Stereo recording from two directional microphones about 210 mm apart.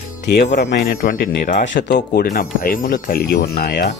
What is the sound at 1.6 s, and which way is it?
Speech, 55° left (ahead or behind).